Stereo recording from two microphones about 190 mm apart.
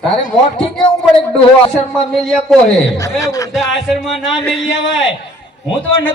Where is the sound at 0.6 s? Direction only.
25° left (ahead or behind).